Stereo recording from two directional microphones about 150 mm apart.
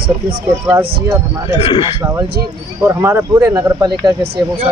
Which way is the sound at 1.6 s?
35° left (ahead or behind).